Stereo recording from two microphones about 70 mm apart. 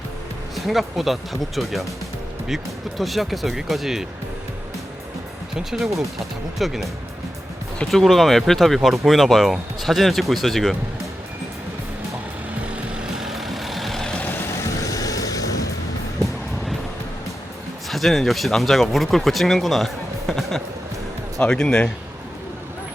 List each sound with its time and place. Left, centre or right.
0.5 s speech: centre
3.0 s speech: centre
5.5 s speech: centre
13.0 s vehicle: centre
14.2 s vehicle: left
14.8 s a sound: left
17.8 s speech: centre